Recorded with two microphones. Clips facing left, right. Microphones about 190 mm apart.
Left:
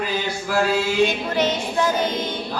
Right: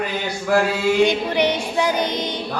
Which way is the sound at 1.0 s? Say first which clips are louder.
Right 3 dB; 15° right (ahead or behind).